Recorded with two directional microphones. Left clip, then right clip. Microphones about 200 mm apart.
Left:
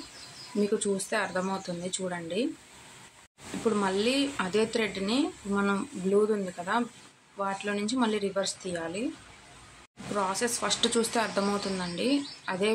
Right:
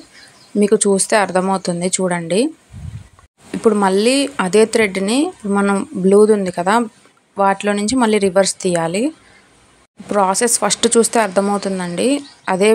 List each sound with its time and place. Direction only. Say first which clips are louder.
0.7 s speech: right 17 dB; 45° right (ahead or behind)
3.6 s speech: right 14 dB; 45° right (ahead or behind)
10.1 s speech: right 14 dB; 45° right (ahead or behind)